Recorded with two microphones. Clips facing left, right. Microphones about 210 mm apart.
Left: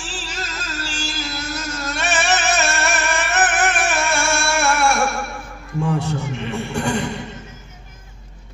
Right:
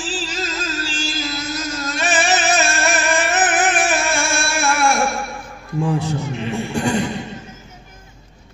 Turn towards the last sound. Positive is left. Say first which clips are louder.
# right 2 dB
turn(degrees=65)  # may be behind; listen again after turning